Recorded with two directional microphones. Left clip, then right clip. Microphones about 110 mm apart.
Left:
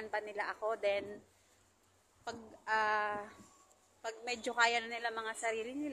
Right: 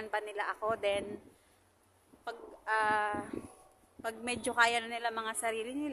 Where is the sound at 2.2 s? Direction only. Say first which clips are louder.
Right 2 dB; 10° right (ahead or behind).